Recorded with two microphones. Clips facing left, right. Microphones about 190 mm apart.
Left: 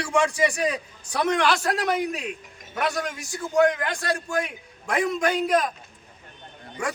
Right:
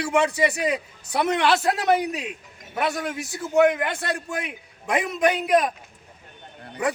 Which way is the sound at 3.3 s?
20° right (ahead or behind).